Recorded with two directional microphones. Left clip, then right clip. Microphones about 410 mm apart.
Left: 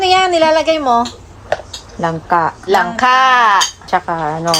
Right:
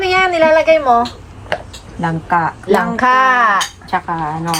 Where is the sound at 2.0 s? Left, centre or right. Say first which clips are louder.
Left 2 dB; centre.